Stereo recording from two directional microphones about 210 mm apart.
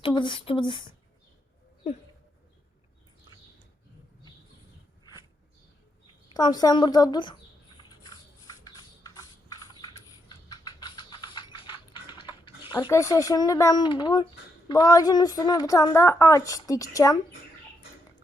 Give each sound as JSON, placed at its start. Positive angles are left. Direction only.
{"t": 0.0, "sound": "a woman's voice", "side_deg": 20}
{"t": 6.2, "sound": "a woman's voice", "side_deg": 20}
{"t": 7.8, "sound": "a sound", "side_deg": 20}
{"t": 12.9, "sound": "a woman's voice", "side_deg": 15}